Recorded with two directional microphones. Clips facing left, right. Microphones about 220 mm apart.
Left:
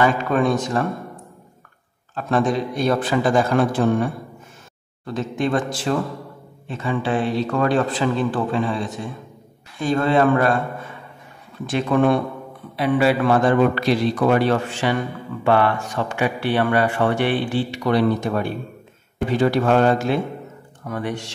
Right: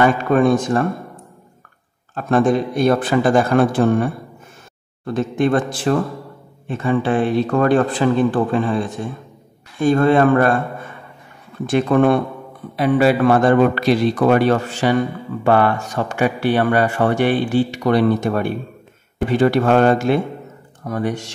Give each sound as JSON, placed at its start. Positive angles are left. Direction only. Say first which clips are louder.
{"t": 0.0, "sound": "a man's voice", "louder": "right 4 dB", "side_deg": -50}
{"t": 2.1, "sound": "a man's voice", "louder": "right 4 dB", "side_deg": -50}
{"t": 11.7, "sound": "a man's voice", "louder": "right 3 dB", "side_deg": -55}
{"t": 20.8, "sound": "a man's voice", "louder": "right 4 dB", "side_deg": -40}